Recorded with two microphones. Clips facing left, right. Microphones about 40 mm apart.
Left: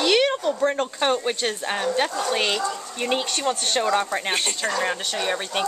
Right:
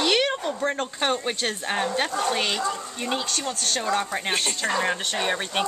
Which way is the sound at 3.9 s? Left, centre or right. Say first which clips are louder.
Even; centre.